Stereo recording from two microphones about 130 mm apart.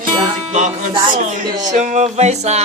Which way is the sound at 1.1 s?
75° right (ahead or behind).